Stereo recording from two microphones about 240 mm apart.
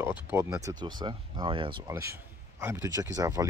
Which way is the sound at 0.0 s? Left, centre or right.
Centre.